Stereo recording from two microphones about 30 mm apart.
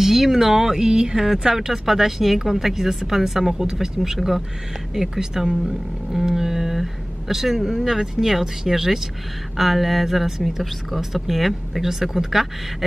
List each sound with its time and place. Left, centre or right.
0.0 s speech: centre
9.6 s a sound: centre
11.1 s speech: centre